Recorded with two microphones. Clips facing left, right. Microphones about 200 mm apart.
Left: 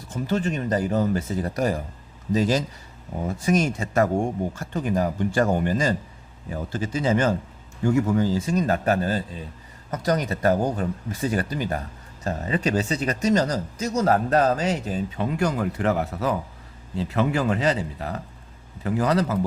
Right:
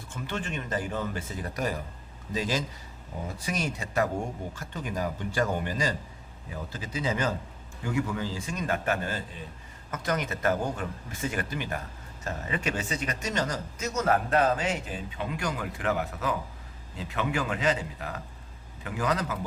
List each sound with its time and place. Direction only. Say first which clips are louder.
0.1 s a man's voice: left 9 dB; 40° left (ahead or behind)